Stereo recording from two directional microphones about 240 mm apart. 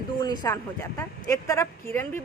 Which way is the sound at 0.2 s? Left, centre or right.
Centre.